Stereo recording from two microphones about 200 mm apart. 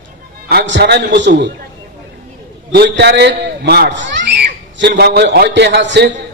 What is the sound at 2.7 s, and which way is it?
A man's voice, 55° right (ahead or behind).